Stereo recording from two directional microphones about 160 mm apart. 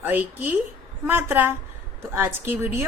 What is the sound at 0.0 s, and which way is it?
A woman's voice, 10° right (ahead or behind).